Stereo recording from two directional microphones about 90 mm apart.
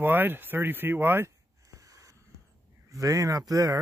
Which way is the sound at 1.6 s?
40° right (ahead or behind).